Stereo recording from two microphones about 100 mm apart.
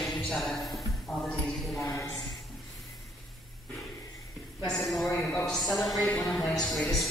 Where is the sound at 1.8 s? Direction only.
35° left (ahead or behind).